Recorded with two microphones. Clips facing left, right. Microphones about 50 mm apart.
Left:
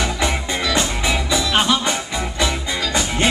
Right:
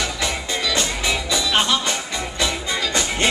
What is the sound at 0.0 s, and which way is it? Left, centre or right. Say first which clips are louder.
Music: left 3 dB; centre.